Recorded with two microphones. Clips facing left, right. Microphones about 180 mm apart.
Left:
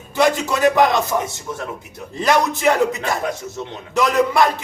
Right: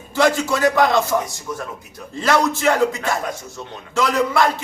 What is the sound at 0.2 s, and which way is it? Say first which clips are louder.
A man's voice: even; 20° left (ahead or behind).